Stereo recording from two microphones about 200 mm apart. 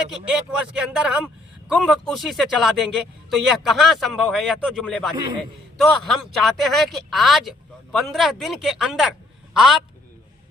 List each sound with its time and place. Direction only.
0.3 s a man's voice: 5° right (ahead or behind)